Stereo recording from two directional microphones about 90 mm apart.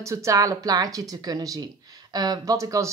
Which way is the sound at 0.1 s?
35° right (ahead or behind).